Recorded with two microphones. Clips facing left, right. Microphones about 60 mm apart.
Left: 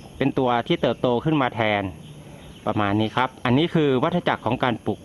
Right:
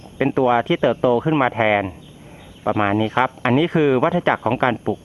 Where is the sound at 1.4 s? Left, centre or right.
Right.